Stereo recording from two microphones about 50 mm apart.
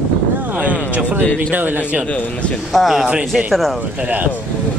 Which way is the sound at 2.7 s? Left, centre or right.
Centre.